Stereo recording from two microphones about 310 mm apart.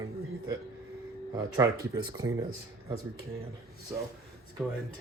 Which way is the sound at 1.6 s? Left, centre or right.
Centre.